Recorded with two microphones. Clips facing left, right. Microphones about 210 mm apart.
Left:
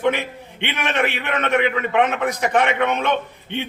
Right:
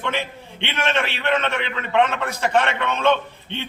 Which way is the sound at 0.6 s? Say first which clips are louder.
Left 1 dB; 15° left (ahead or behind).